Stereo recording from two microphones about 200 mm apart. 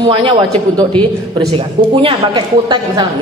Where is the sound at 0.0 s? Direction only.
25° right (ahead or behind).